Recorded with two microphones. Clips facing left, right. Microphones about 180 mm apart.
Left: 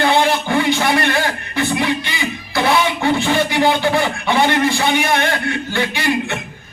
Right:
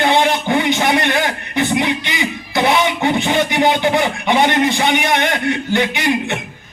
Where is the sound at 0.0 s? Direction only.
20° right (ahead or behind).